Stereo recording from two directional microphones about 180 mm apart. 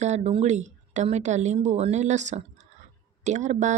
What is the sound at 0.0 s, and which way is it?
Speech, 35° right (ahead or behind).